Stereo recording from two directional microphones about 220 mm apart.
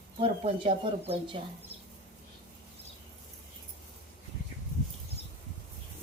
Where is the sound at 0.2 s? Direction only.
25° right (ahead or behind).